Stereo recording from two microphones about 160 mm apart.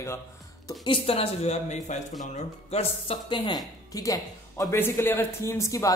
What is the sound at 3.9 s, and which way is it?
A man's voice, 20° left (ahead or behind).